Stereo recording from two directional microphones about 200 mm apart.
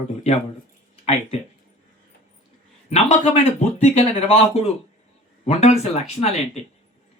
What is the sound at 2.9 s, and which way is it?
Speech, 35° left (ahead or behind).